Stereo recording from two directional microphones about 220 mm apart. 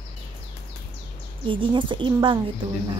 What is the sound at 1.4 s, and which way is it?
Speech, 20° right (ahead or behind).